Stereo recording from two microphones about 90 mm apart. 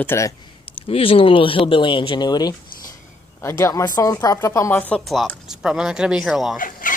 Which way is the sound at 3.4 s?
35° left (ahead or behind).